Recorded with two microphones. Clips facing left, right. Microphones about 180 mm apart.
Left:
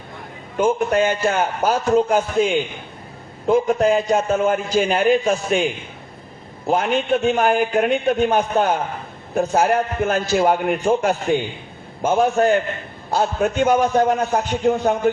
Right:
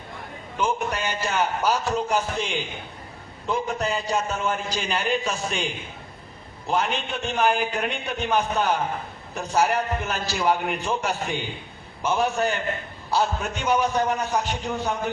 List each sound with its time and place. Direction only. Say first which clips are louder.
0.5 s a man's voice: left 8 dB; 50° left (ahead or behind)
6.7 s a man's voice: left 7 dB; 50° left (ahead or behind)